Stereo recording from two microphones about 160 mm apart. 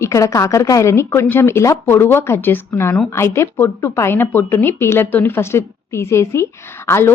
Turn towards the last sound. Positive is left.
turn(degrees=15)  # may be behind; listen again after turning